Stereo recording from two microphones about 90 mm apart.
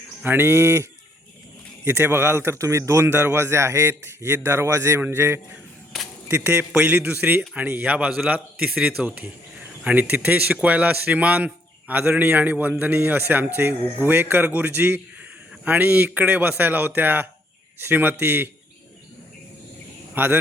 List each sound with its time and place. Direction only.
0.3 s a man's voice: 25° right (ahead or behind)
8.7 s speech: 5° right (ahead or behind)
9.8 s a man's voice: 15° right (ahead or behind)
20.1 s a man's voice: 25° right (ahead or behind)